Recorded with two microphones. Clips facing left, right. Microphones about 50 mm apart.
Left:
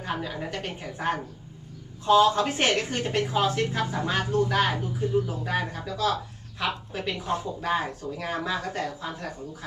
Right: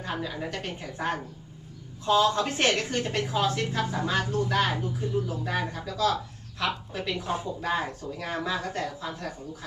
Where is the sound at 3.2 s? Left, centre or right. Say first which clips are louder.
Left 4 dB; centre.